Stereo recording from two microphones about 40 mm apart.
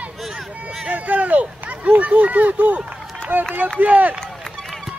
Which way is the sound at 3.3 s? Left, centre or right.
Right.